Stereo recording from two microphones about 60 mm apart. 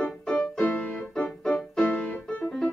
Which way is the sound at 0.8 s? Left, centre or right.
Centre.